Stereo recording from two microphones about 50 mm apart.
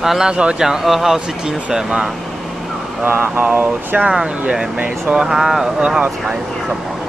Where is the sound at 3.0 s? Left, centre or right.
Right.